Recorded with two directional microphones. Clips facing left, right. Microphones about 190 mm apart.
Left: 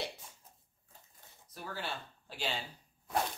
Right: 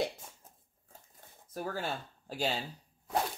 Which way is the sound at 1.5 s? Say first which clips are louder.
Right 5 dB; 45° right (ahead or behind).